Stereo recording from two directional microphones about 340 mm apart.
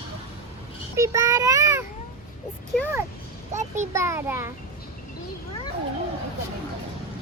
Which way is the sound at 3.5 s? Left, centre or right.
Right.